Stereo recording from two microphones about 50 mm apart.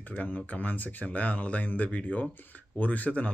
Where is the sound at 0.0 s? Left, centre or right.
Left.